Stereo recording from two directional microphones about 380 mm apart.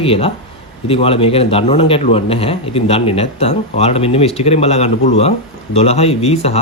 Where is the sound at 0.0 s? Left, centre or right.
Centre.